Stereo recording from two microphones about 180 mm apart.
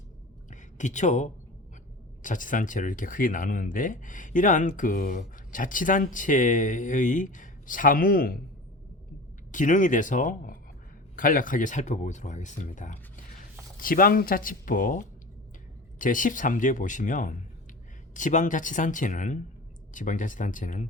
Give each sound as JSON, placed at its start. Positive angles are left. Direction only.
{"t": 0.5, "sound": "a sound", "side_deg": 45}
{"t": 2.2, "sound": "speech", "side_deg": 45}
{"t": 9.5, "sound": "speech", "side_deg": 45}